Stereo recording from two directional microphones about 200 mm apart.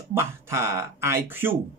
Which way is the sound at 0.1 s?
15° right (ahead or behind).